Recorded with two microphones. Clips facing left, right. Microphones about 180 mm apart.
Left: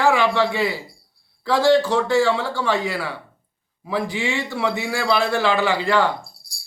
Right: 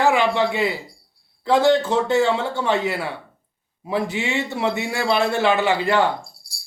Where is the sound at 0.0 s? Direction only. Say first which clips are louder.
Even; 20° right (ahead or behind).